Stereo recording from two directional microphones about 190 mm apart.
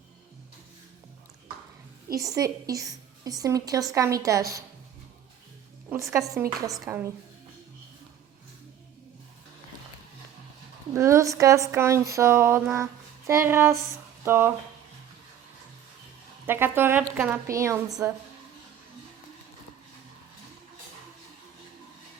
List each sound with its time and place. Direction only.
2.1 s a woman's voice: 20° right (ahead or behind)
5.9 s a woman's voice: 15° right (ahead or behind)
10.9 s a woman's voice: 15° right (ahead or behind)
16.5 s a woman's voice: 10° right (ahead or behind)